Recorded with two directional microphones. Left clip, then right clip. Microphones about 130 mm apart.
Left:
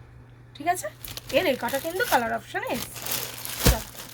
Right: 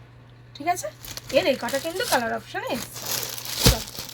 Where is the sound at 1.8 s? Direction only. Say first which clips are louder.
Even; 15° left (ahead or behind).